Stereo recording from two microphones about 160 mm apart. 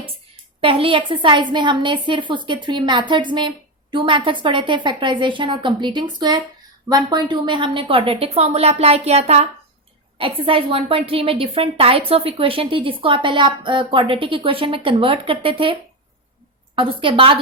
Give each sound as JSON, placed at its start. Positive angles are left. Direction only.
{"t": 0.6, "sound": "a woman's voice", "side_deg": -35}